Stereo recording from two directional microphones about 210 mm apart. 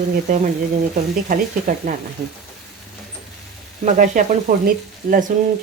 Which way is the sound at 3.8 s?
35° right (ahead or behind).